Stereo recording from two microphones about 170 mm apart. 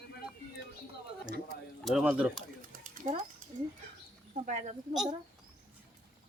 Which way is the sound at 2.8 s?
50° right (ahead or behind).